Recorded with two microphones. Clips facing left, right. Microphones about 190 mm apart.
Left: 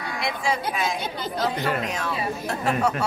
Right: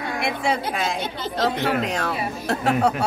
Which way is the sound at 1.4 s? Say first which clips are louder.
Right 4 dB; 70° right (ahead or behind).